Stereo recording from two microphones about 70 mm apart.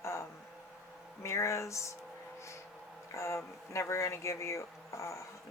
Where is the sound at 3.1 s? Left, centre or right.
Left.